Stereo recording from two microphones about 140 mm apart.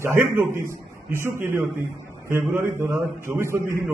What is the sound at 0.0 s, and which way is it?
A man's voice, 15° right (ahead or behind).